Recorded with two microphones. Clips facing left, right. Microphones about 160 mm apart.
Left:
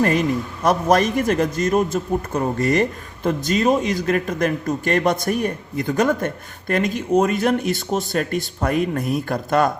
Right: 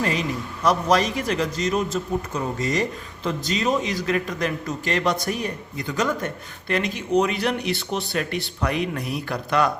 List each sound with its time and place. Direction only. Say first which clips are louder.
0.0 s a man's voice: left 6 dB; 50° left (ahead or behind)